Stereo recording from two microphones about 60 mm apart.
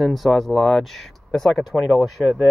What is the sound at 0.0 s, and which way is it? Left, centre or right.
Speech, centre.